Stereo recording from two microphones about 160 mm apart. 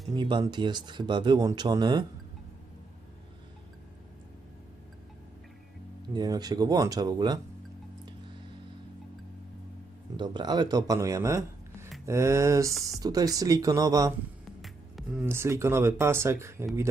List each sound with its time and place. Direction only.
0.2 s speech: 30° right (ahead or behind)
6.1 s speech: 25° right (ahead or behind)
10.2 s speech: 25° right (ahead or behind)
14.6 s music: 5° right (ahead or behind)
15.3 s speech: 15° right (ahead or behind)